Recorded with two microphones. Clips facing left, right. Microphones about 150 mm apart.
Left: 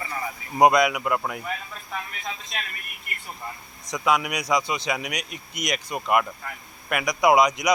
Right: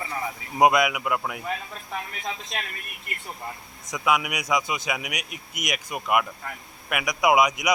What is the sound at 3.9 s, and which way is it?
A man's voice, 5° right (ahead or behind).